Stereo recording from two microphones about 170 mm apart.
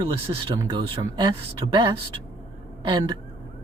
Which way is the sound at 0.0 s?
25° right (ahead or behind).